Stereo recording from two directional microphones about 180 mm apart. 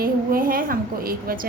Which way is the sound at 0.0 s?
55° right (ahead or behind).